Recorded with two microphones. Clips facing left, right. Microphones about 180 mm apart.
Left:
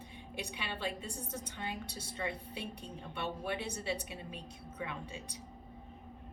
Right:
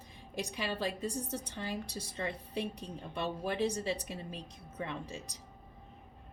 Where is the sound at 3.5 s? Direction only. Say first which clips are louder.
Right 5 dB; 40° right (ahead or behind).